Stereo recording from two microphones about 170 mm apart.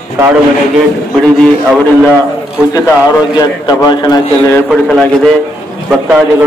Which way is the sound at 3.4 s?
25° left (ahead or behind).